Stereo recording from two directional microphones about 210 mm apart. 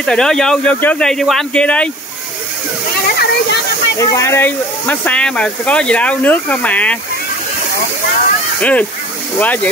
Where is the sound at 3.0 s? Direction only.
50° left (ahead or behind).